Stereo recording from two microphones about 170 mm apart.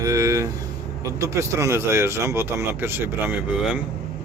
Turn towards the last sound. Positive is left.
turn(degrees=-5)  # may be behind; listen again after turning